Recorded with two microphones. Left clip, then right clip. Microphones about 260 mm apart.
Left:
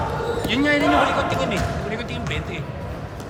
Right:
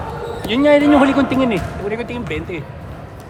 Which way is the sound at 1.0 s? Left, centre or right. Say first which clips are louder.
Right 5 dB; right.